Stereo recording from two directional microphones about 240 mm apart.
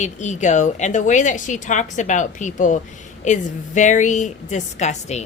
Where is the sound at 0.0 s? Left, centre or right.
Left.